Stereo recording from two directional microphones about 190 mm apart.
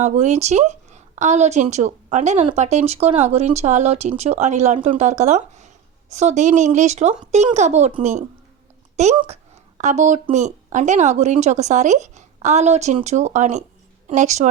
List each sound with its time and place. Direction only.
0.0 s speech: 40° right (ahead or behind)